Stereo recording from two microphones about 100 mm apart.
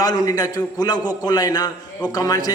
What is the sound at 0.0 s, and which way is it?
A man's voice, 40° left (ahead or behind).